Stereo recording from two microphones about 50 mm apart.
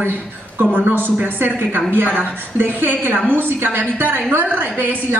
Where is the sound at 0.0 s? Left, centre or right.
Right.